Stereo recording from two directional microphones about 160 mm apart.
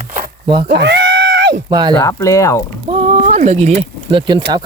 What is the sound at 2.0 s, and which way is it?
Speech, 25° left (ahead or behind).